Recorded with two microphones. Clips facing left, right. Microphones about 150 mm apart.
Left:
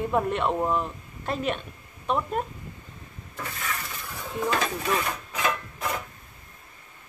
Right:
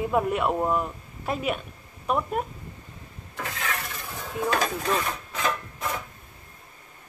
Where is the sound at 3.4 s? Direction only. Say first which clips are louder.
Right 2 dB; 90° right.